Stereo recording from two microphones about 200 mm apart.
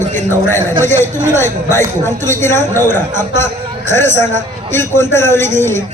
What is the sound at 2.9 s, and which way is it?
A woman's voice, 40° right (ahead or behind).